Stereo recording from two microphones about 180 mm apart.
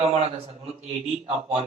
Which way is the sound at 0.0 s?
35° right (ahead or behind).